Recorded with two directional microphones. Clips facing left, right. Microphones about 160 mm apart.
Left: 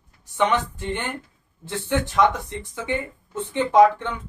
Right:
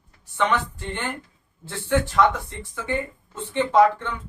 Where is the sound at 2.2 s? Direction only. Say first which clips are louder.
Even; 15° left (ahead or behind).